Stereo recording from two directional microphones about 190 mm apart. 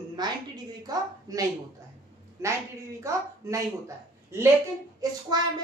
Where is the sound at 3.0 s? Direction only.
15° right (ahead or behind).